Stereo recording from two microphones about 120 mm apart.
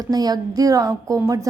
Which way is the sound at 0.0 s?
35° right (ahead or behind).